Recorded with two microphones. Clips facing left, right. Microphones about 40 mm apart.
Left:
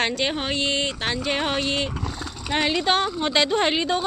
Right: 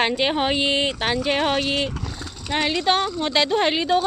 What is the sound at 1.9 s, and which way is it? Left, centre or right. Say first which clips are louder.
A woman's voice: left 1 dB; centre.